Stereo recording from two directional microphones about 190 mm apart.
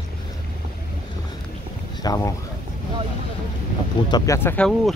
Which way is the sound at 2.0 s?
20° left (ahead or behind).